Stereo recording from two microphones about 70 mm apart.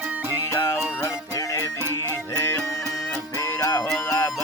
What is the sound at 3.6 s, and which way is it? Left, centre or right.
Music, left.